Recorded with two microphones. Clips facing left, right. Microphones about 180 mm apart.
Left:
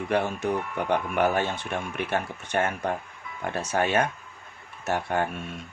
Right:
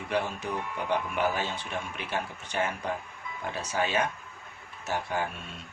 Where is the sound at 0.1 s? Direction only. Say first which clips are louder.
Left 5 dB; 55° left (ahead or behind).